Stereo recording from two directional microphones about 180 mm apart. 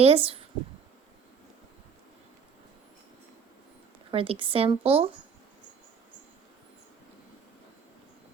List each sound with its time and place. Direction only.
0.0 s a woman's voice: 35° right (ahead or behind)
4.1 s a woman's voice: 30° right (ahead or behind)